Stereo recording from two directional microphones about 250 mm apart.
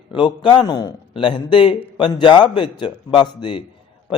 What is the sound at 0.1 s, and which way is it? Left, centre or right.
A man's voice, centre.